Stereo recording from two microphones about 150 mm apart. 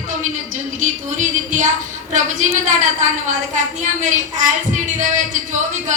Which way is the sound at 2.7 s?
55° right (ahead or behind).